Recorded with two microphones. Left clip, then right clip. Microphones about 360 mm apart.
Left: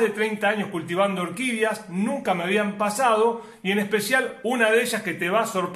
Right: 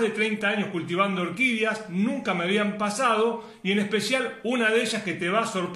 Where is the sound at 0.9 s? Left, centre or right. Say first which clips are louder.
Left 2 dB; left.